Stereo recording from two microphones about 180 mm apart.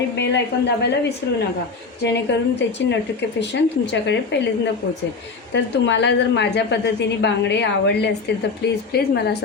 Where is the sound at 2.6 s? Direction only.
75° left (ahead or behind).